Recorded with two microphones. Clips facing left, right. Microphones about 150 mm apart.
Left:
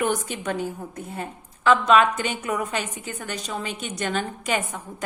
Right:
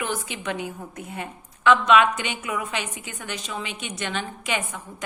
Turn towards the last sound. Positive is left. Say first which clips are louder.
# left 2 dB
turn(degrees=40)  # may be behind; listen again after turning